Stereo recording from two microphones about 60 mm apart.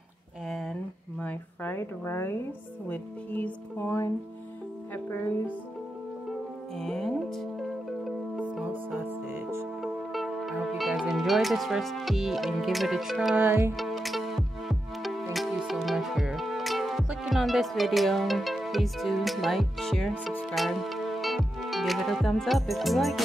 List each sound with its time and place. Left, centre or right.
0.5 s a sound: centre
1.2 s a sound: left
1.8 s speech: left
2.9 s speech: left
3.7 s speech: left
4.9 s speech: left
6.8 s music: centre
9.0 s music: right
9.8 s music: centre